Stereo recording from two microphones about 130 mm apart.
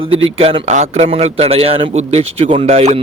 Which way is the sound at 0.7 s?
60° right (ahead or behind).